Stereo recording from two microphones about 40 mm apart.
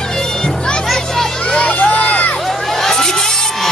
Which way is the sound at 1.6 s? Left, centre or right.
Left.